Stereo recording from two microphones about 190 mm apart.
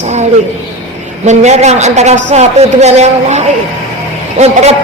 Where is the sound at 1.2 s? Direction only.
35° right (ahead or behind).